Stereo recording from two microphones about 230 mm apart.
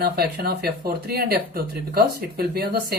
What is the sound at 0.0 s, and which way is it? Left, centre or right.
Speech, right.